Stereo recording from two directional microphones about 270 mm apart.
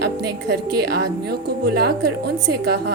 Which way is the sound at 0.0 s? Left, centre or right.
Right.